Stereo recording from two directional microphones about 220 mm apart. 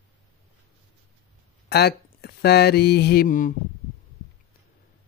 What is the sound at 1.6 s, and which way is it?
Speech, 45° left (ahead or behind).